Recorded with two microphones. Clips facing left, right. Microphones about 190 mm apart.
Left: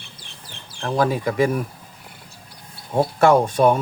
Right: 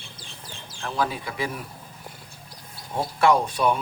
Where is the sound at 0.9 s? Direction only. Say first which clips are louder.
Left 7 dB; 45° left (ahead or behind).